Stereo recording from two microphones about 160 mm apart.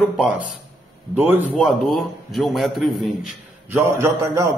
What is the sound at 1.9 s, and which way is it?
A man's voice, centre (ahead or behind).